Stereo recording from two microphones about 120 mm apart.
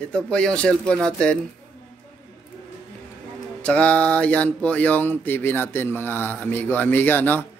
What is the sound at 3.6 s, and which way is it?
Speech, 10° left (ahead or behind).